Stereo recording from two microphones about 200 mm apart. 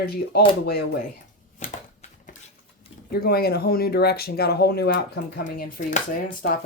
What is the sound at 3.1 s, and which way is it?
Speech, 50° left (ahead or behind).